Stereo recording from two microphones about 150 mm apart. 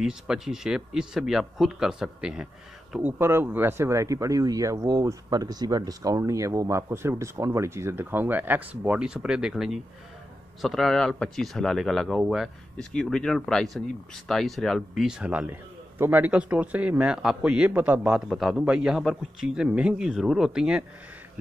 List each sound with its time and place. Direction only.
0.0 s speech: 5° right (ahead or behind)